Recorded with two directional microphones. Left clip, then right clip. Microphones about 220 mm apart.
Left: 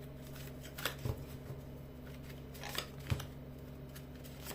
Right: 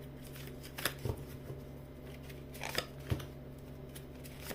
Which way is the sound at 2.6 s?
20° right (ahead or behind).